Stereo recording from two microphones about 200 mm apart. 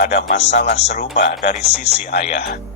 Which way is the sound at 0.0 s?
55° left (ahead or behind).